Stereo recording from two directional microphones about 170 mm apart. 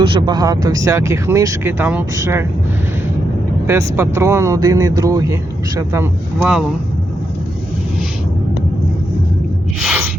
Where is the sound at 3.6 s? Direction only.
15° right (ahead or behind).